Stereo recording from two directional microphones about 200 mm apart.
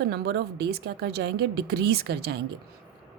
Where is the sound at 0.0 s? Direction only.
55° right (ahead or behind).